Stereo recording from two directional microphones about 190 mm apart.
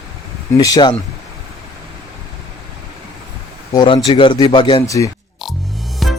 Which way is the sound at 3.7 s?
20° left (ahead or behind).